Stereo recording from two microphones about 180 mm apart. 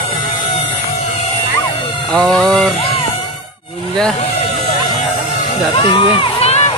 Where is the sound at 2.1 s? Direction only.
5° left (ahead or behind).